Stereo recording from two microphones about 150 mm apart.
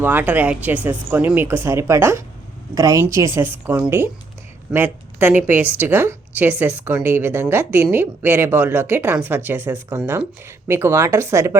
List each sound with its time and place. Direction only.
0.0 s speech: 10° right (ahead or behind)